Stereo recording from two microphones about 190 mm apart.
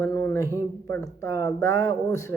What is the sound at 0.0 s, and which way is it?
Speech, 15° left (ahead or behind).